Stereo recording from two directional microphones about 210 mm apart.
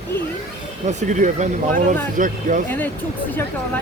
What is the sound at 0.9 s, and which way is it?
Speech, 35° right (ahead or behind).